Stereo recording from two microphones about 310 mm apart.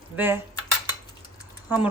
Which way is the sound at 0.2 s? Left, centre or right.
Centre.